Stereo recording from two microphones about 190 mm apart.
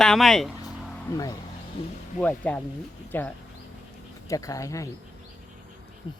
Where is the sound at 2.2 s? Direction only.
10° left (ahead or behind).